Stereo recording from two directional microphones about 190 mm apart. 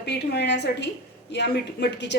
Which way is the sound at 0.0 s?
65° left (ahead or behind).